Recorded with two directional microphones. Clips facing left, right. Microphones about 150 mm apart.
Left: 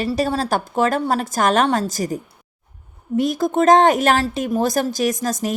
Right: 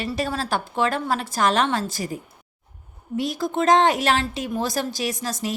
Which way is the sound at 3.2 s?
50° left (ahead or behind).